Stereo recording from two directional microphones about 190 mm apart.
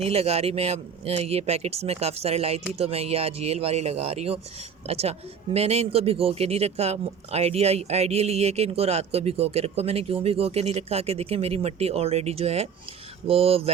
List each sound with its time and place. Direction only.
0.0 s speech: 30° right (ahead or behind)